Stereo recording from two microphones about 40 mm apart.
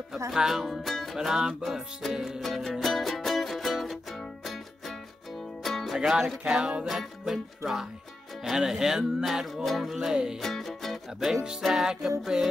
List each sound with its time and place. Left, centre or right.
0.1 s music: centre
0.6 s music: centre
1.1 s music: centre
1.6 s music: centre
2.1 s music: centre
2.4 s music: centre
6.0 s music: centre
6.9 s music: centre
10.4 s music: centre
11.8 s music: centre